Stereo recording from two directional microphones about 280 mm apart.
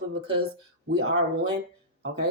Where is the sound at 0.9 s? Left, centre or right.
Right.